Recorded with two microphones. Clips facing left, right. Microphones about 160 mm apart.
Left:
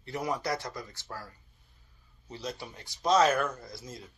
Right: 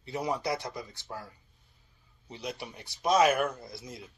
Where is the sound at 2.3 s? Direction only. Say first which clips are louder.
Even; 15° right (ahead or behind).